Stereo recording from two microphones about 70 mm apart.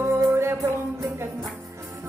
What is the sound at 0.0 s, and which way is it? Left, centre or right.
Music, right.